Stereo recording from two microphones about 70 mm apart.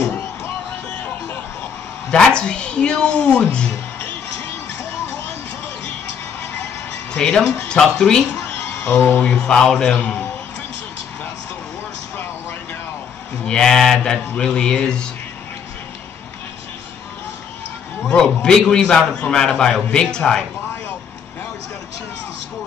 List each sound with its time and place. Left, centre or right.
2.0 s a man's voice: centre
7.2 s a man's voice: centre
8.8 s speech: left
9.2 s a man's voice: centre
13.5 s a man's voice: centre
18.0 s a man's voice: centre